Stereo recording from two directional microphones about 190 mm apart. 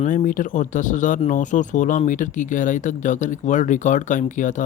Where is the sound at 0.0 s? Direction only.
45° left (ahead or behind).